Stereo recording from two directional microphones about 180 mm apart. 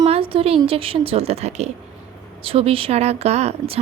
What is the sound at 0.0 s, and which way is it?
A woman's voice, 30° right (ahead or behind).